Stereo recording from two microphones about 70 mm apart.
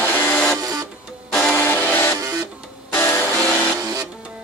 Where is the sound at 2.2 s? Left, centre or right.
Right.